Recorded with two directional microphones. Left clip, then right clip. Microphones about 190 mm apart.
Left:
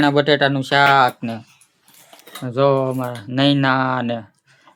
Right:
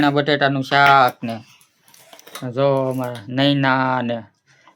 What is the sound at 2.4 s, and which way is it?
Speech, 5° left (ahead or behind).